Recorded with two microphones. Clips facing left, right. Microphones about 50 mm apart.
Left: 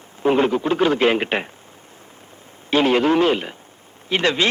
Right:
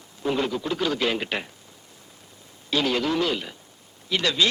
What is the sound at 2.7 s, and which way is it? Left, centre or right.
A man's voice, left.